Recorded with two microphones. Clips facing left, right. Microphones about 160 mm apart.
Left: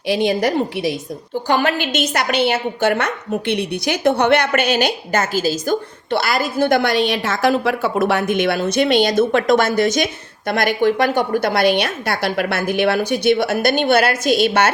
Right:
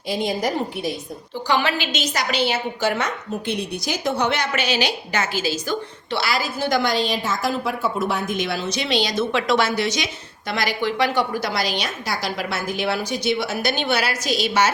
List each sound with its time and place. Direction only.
0.1 s a woman's voice: 70° left (ahead or behind)
1.5 s a woman's voice: 50° left (ahead or behind)